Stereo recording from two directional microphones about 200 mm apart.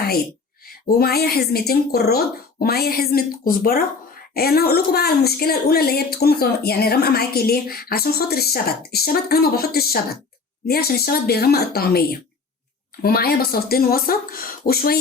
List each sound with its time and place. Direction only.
0.7 s speech: 50° left (ahead or behind)